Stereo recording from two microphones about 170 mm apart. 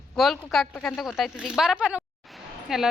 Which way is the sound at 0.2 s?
Centre (ahead or behind).